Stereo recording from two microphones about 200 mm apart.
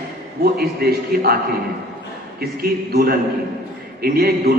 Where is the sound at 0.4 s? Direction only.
50° right (ahead or behind).